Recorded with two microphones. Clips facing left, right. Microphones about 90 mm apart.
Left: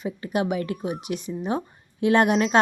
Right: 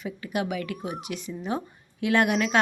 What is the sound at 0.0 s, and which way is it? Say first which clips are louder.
A woman's voice: left 4 dB; 25° left (ahead or behind).